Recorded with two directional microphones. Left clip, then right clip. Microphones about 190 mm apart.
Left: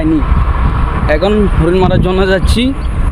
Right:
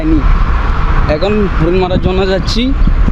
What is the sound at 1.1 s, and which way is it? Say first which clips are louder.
Speech: left 2 dB; 5° left (ahead or behind).